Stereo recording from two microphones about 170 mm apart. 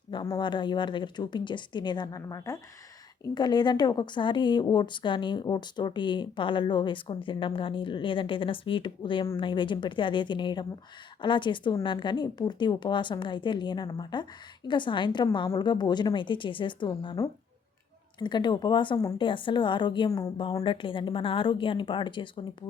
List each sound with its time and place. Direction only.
0.1 s a woman's voice: 25° left (ahead or behind)